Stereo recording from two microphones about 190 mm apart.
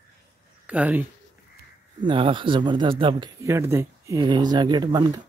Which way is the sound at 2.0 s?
25° right (ahead or behind).